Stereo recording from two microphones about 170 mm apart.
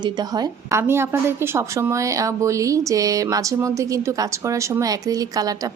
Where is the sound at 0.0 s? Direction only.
25° right (ahead or behind).